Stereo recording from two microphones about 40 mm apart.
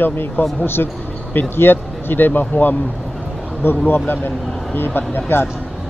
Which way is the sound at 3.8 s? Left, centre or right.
Left.